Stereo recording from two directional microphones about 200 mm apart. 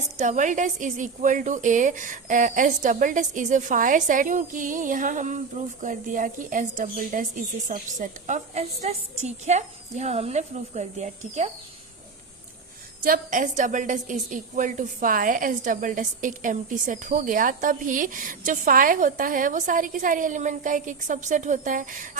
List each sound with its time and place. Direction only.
0.2 s a woman's voice: 40° right (ahead or behind)
13.0 s a woman's voice: 40° right (ahead or behind)